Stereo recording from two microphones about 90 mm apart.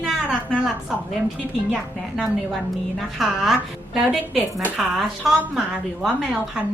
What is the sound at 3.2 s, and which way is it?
A woman's voice, 5° right (ahead or behind).